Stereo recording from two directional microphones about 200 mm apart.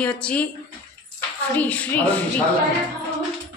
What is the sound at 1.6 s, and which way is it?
Speech, 10° left (ahead or behind).